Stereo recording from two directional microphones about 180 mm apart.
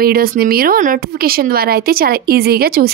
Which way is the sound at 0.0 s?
55° right (ahead or behind).